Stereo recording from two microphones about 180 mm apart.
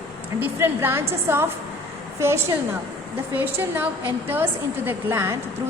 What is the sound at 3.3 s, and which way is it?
Speech, 10° right (ahead or behind).